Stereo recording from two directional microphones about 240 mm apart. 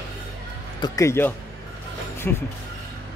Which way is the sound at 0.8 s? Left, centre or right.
Centre.